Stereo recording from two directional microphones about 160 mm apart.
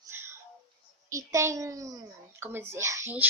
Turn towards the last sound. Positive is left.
turn(degrees=-15)  # may be behind; listen again after turning